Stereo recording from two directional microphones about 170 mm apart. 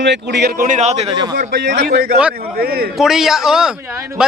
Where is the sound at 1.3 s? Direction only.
65° right (ahead or behind).